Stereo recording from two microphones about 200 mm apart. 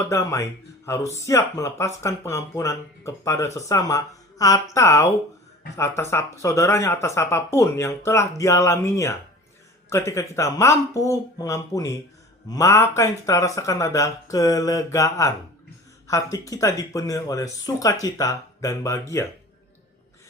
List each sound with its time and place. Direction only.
0.0 s speech: 15° left (ahead or behind)